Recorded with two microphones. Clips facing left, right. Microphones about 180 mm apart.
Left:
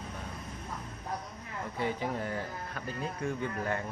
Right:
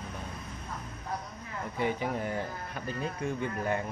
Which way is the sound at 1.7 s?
15° right (ahead or behind).